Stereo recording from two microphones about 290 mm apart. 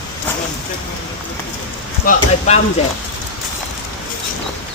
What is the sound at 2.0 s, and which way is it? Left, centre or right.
Speech, left.